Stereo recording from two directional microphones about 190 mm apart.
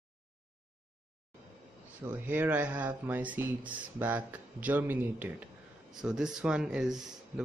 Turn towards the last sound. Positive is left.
turn(degrees=0)  # may be behind; listen again after turning